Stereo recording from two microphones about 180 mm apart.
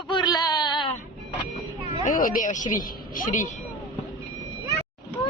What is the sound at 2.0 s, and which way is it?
A woman's voice, 50° left (ahead or behind).